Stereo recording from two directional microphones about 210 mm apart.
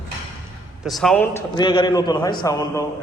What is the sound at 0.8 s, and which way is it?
Speech, centre (ahead or behind).